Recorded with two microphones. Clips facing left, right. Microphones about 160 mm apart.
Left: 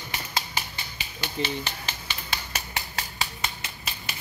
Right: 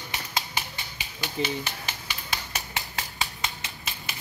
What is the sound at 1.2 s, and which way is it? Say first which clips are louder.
Speech: right 1 dB; 10° right (ahead or behind).